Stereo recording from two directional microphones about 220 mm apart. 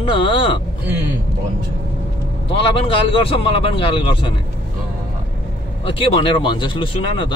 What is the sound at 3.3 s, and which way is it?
Speech, 25° left (ahead or behind).